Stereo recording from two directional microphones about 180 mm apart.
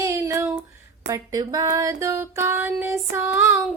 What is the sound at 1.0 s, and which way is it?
Female singing, 20° right (ahead or behind).